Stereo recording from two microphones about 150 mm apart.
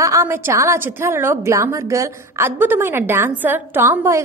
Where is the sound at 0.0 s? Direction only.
20° right (ahead or behind).